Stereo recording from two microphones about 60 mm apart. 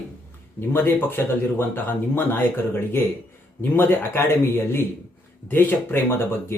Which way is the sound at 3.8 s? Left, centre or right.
Left.